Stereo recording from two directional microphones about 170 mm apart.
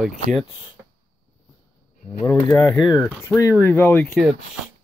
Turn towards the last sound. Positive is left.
turn(degrees=-5)  # may be behind; listen again after turning